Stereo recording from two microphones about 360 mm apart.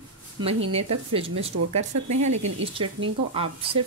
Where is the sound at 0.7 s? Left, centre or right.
Centre.